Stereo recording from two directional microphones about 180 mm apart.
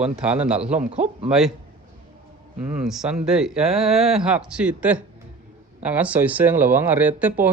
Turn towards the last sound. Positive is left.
turn(degrees=-10)  # may be behind; listen again after turning